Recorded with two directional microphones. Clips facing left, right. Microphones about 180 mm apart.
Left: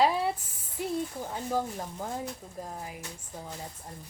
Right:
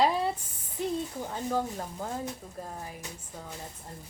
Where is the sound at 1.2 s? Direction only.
10° left (ahead or behind).